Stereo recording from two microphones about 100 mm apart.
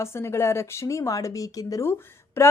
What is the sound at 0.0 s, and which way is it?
A woman's voice, 25° left (ahead or behind).